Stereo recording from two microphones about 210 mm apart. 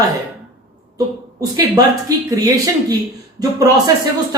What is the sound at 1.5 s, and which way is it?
Speech, 20° right (ahead or behind).